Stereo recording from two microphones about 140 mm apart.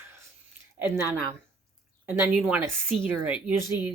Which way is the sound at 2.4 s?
10° right (ahead or behind).